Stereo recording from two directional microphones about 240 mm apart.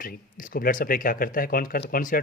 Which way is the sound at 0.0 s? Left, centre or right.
Left.